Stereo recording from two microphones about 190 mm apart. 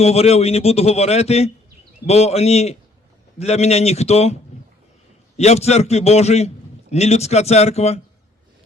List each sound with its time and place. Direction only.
0.0 s a man's voice: 35° left (ahead or behind)
5.4 s a man's voice: 35° left (ahead or behind)